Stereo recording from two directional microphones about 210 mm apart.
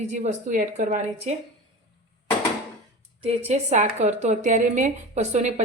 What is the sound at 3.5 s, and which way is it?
A woman's voice, 30° right (ahead or behind).